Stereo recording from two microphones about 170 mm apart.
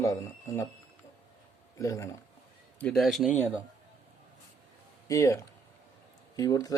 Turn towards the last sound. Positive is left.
turn(degrees=20)  # may be behind; listen again after turning